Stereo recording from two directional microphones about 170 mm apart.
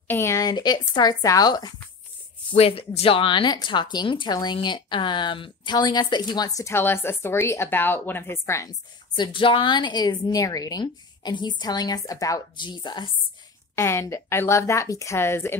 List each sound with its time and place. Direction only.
0.1 s a woman's voice: 15° left (ahead or behind)
2.5 s a woman's voice: 35° left (ahead or behind)
13.7 s a woman's voice: 15° left (ahead or behind)